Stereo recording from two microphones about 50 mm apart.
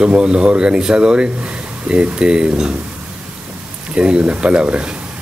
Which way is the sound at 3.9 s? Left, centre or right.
Right.